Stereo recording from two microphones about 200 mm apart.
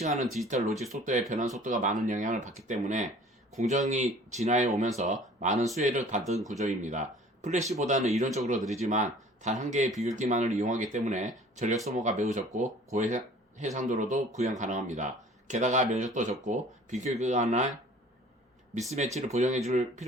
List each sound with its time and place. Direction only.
0.0 s speech: 40° right (ahead or behind)
18.9 s speech: 35° right (ahead or behind)